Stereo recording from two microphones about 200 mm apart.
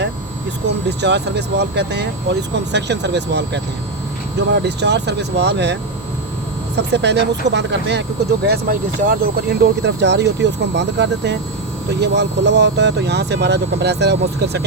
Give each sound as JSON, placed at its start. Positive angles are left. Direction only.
{"t": 0.9, "sound": "speech", "side_deg": -55}
{"t": 6.7, "sound": "speech", "side_deg": -60}
{"t": 8.4, "sound": "speech", "side_deg": -45}